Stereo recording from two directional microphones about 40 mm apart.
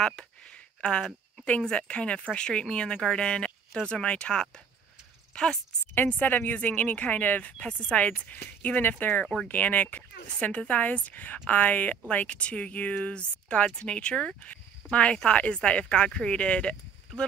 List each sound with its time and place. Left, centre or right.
0.0 s speech: centre
5.3 s speech: left
6.0 s speech: left
7.5 s speech: left
10.5 s speech: left
10.8 s speech: left
15.8 s speech: centre